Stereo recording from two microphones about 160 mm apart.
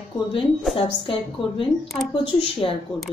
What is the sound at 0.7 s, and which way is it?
Speech, 35° left (ahead or behind).